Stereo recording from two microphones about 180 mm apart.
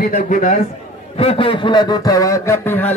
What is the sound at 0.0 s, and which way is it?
Speech, 50° left (ahead or behind).